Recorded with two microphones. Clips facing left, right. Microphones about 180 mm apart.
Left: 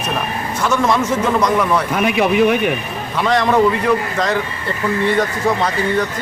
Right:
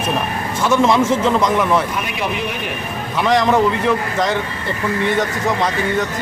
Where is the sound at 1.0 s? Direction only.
25° right (ahead or behind).